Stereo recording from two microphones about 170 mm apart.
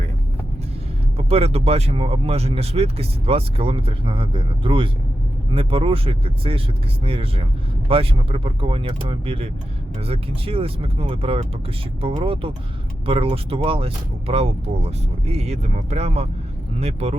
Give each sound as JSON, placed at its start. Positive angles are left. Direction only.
{"t": 1.1, "sound": "speech", "side_deg": -35}